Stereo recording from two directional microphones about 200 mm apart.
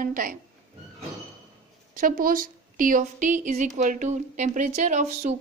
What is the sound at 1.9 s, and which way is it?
A woman's voice, 45° right (ahead or behind).